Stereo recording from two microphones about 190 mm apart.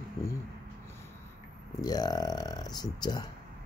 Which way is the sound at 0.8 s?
15° left (ahead or behind).